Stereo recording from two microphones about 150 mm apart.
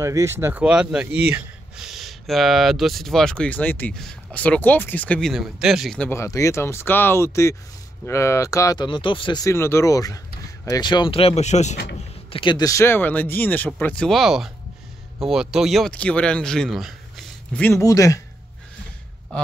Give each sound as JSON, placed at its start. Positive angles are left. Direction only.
{"t": 0.0, "sound": "speech", "side_deg": -20}
{"t": 6.0, "sound": "speech", "side_deg": 20}
{"t": 8.8, "sound": "speech", "side_deg": 35}
{"t": 12.3, "sound": "speech", "side_deg": 35}
{"t": 17.8, "sound": "speech", "side_deg": 20}